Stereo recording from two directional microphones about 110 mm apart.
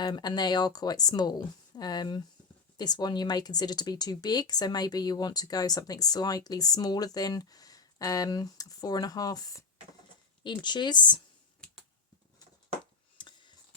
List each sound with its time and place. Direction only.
0.0 s speech: 40° left (ahead or behind)
10.4 s speech: 45° left (ahead or behind)
13.1 s a sound: 45° left (ahead or behind)